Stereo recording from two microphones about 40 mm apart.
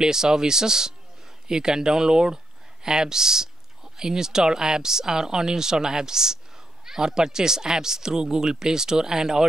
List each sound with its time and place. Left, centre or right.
0.0 s speech: centre